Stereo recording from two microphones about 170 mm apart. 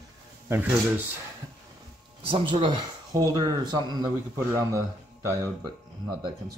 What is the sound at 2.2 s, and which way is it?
A man's voice, 30° right (ahead or behind).